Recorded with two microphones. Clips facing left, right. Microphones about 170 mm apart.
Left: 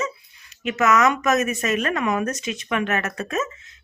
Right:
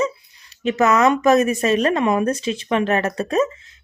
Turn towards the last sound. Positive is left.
turn(degrees=-35)  # may be behind; listen again after turning